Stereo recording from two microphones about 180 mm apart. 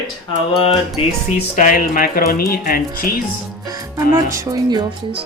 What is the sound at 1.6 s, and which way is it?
Speech, 45° left (ahead or behind).